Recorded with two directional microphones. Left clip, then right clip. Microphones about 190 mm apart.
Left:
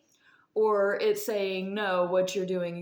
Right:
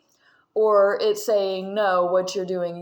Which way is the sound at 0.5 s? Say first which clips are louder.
Right 7 dB; 40° right (ahead or behind).